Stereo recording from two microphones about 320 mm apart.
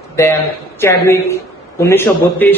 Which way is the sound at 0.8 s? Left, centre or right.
Centre.